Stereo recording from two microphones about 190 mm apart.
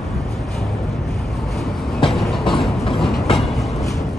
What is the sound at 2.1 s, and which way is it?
Vehicle, centre (ahead or behind).